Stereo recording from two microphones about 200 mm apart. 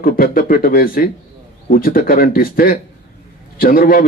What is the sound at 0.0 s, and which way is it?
A man's voice, 45° left (ahead or behind).